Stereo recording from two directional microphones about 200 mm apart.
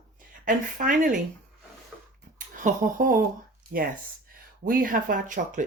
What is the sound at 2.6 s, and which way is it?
Speech, 45° right (ahead or behind).